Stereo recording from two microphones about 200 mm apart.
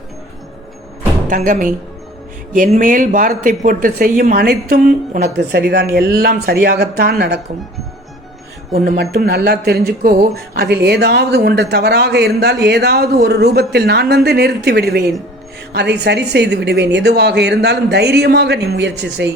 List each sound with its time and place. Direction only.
1.3 s speech: 40° right (ahead or behind)
8.7 s a woman's voice: 50° right (ahead or behind)